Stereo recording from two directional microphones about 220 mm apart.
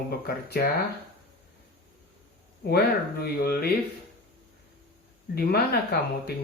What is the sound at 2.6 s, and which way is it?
Speech, 45° left (ahead or behind).